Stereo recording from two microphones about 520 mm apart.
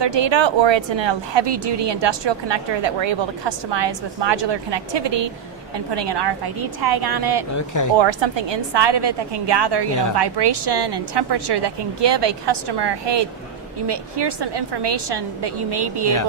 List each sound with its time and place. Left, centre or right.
0.0 s a woman's voice: right
7.5 s speech: left
7.9 s a woman's voice: right